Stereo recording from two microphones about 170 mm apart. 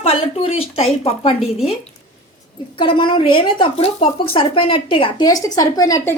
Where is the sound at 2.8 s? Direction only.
30° left (ahead or behind).